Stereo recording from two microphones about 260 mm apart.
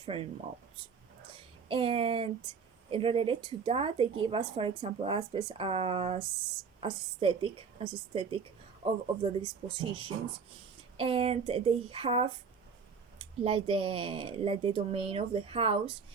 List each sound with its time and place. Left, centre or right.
0.0 s speech: right
1.6 s speech: centre